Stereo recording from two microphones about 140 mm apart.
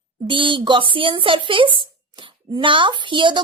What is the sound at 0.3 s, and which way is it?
Speech, 35° right (ahead or behind).